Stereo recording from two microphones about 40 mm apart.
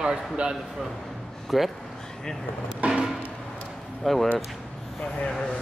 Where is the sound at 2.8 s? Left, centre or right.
Right.